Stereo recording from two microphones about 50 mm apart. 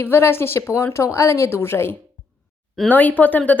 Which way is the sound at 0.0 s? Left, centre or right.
Left.